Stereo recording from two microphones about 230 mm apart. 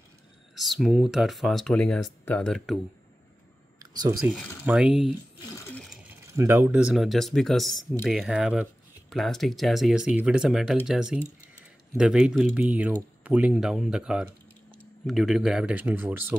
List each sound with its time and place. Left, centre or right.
0.6 s speech: centre
3.8 s a sound: centre
4.2 s speech: centre
6.3 s speech: centre